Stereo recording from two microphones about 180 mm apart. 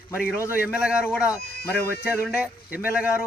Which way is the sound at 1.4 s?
60° left (ahead or behind).